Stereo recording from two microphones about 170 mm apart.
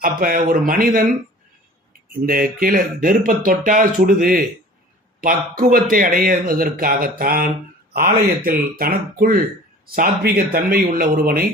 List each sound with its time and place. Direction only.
0.0 s speech: 55° right (ahead or behind)
2.2 s speech: 55° right (ahead or behind)